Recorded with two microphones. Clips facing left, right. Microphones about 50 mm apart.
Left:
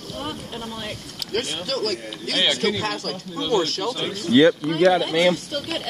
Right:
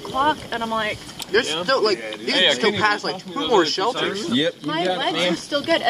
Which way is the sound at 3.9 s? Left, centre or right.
Right.